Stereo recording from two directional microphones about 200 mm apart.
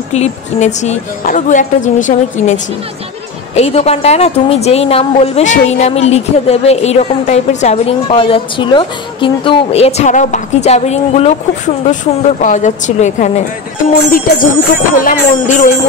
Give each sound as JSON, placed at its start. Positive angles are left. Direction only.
{"t": 0.1, "sound": "a woman's voice", "side_deg": 35}
{"t": 14.1, "sound": "music", "side_deg": 45}
{"t": 15.0, "sound": "a woman's voice", "side_deg": 40}